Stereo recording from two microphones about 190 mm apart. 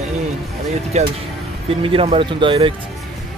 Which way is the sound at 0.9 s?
35° right (ahead or behind).